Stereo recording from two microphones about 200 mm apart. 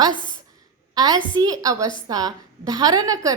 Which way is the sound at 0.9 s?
20° right (ahead or behind).